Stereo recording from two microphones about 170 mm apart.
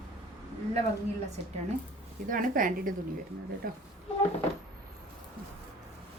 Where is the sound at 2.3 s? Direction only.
55° right (ahead or behind).